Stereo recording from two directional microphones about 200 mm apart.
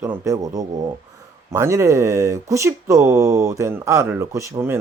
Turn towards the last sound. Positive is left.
turn(degrees=-15)  # may be behind; listen again after turning